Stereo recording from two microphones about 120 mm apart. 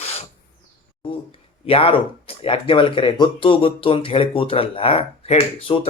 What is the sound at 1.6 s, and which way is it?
Speech, 50° left (ahead or behind).